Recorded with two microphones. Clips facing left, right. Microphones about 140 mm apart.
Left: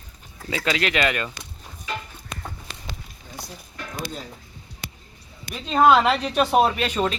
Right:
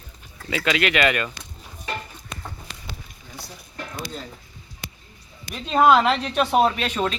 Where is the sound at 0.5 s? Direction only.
30° left (ahead or behind).